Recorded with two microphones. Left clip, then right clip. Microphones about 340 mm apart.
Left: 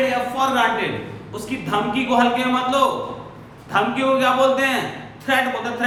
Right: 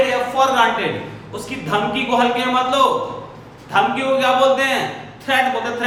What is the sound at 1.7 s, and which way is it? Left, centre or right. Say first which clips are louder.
A man's voice: right 2 dB; centre.